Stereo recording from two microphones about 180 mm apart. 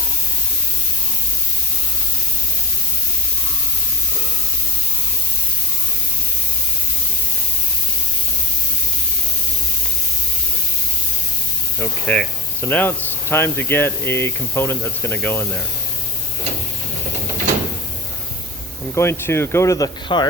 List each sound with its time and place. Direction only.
11.8 s speech: 5° left (ahead or behind)
18.9 s speech: 15° left (ahead or behind)